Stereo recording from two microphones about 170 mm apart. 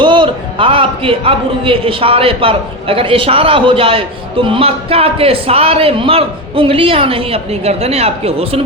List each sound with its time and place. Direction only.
0.0 s a man's voice: 30° right (ahead or behind)